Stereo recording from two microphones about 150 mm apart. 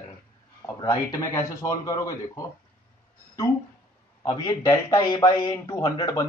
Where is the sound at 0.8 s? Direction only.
20° left (ahead or behind).